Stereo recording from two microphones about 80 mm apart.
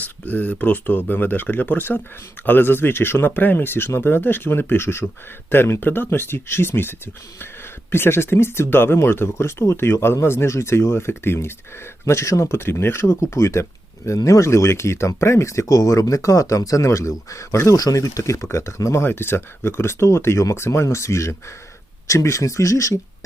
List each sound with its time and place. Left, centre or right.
0.0 s speech: centre; by 23.0 s left